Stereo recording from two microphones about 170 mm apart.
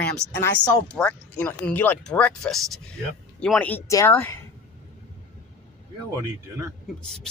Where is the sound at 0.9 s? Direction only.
5° left (ahead or behind).